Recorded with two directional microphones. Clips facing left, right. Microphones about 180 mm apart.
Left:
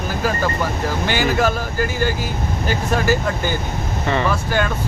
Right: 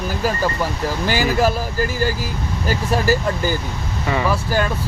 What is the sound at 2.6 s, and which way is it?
Speech, 35° right (ahead or behind).